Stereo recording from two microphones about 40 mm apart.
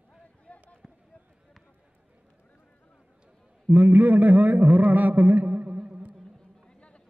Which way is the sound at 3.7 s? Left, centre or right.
Right.